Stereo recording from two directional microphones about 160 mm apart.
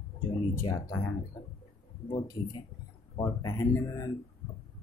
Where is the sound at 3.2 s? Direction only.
20° left (ahead or behind).